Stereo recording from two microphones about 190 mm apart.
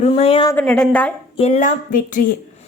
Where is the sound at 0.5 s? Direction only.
5° left (ahead or behind).